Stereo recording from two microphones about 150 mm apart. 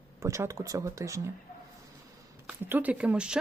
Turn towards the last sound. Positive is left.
turn(degrees=-5)  # may be behind; listen again after turning